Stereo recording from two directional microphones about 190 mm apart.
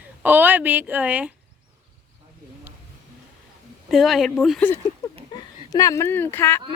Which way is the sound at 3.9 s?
Centre (ahead or behind).